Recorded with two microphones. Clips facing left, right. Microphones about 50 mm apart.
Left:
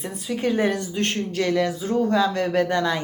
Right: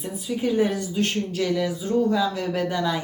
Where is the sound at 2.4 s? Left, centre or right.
Left.